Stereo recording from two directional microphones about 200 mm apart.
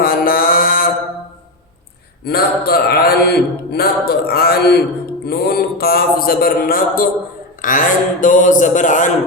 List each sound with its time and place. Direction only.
0.0 s mantra: 45° left (ahead or behind)
2.2 s mantra: 50° left (ahead or behind)
7.6 s a man's voice: 40° left (ahead or behind)